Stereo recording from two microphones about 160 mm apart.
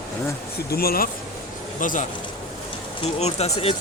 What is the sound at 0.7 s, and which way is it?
Speech, 75° left (ahead or behind).